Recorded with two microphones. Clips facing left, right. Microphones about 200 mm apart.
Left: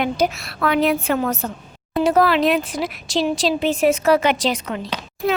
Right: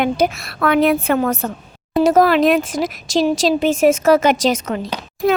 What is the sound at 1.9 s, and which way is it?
Speech, 45° right (ahead or behind).